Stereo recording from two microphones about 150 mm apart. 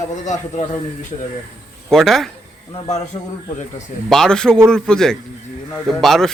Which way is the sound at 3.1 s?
50° left (ahead or behind).